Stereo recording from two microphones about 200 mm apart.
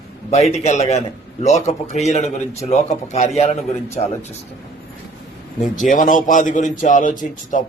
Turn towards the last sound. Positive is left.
turn(degrees=40)  # may be behind; listen again after turning